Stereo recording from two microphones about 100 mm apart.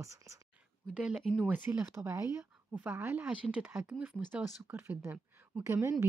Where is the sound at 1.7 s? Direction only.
20° right (ahead or behind).